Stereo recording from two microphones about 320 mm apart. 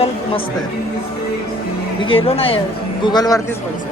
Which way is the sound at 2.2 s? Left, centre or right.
Centre.